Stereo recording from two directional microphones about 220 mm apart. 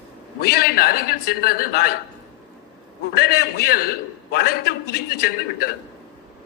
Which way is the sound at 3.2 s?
45° left (ahead or behind).